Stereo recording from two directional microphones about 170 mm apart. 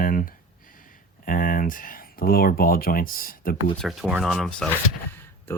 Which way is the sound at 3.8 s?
Centre (ahead or behind).